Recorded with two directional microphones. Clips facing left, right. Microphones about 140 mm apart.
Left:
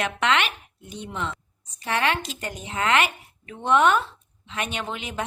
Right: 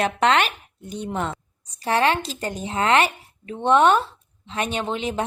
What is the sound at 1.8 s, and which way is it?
A woman's voice, 35° right (ahead or behind).